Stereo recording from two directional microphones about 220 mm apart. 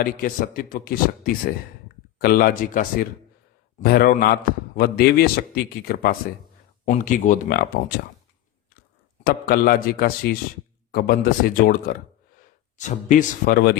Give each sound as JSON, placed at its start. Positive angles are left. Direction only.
{"t": 0.0, "sound": "a man's voice", "side_deg": 40}
{"t": 9.2, "sound": "a man's voice", "side_deg": 40}